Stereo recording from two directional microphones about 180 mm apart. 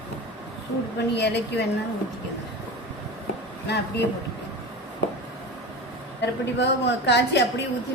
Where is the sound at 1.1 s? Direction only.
70° left (ahead or behind).